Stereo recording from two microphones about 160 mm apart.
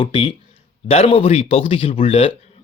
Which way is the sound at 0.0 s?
35° left (ahead or behind).